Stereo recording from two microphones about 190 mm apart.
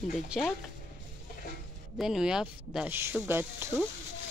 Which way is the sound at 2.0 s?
5° right (ahead or behind).